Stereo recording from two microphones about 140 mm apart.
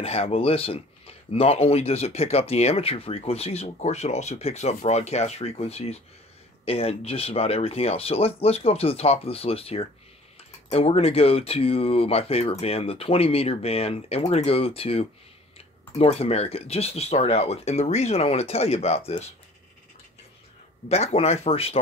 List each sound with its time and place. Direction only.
0.0 s speech: 45° left (ahead or behind)
20.9 s speech: 50° left (ahead or behind)